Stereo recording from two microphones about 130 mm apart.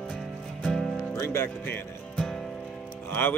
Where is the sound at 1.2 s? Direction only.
20° left (ahead or behind).